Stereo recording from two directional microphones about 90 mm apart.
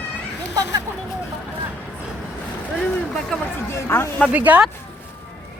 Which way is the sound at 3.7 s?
30° left (ahead or behind).